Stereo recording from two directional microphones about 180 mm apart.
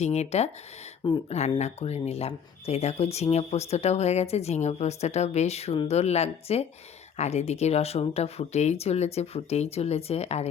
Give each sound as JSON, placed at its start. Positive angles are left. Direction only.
{"t": 0.0, "sound": "speech", "side_deg": 35}